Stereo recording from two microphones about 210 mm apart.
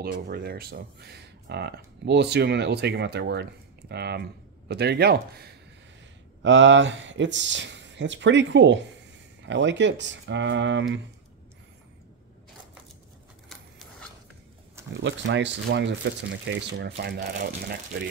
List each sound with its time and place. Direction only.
0.0 s speech: 45° right (ahead or behind)
6.4 s speech: 60° right (ahead or behind)
15.0 s speech: 60° right (ahead or behind)